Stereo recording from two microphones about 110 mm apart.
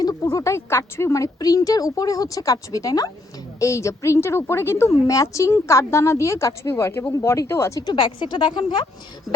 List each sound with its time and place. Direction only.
0.0 s a woman's voice: 35° left (ahead or behind)
7.9 s speech: 40° left (ahead or behind)